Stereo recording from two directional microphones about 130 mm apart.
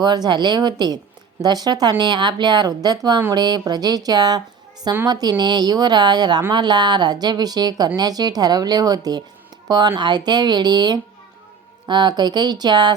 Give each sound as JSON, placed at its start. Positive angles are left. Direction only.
{"t": 0.0, "sound": "speech", "side_deg": -35}